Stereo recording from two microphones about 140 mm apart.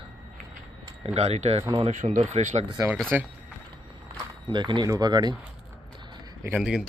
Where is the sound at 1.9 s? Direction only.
60° right (ahead or behind).